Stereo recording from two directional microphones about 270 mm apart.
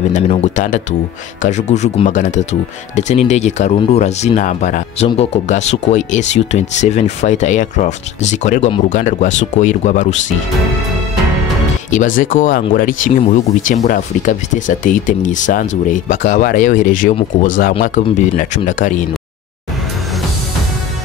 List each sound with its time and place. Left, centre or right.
0.1 s speech: left
12.2 s speech: left